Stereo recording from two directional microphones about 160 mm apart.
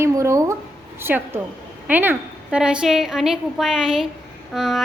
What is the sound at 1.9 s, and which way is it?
A woman's voice, 10° right (ahead or behind).